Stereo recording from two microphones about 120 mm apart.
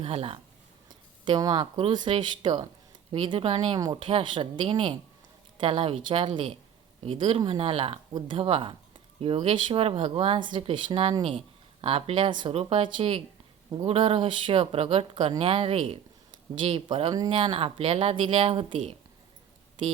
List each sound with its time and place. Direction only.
0.0 s speech: 55° right (ahead or behind)
0.9 s a woman's voice: 40° right (ahead or behind)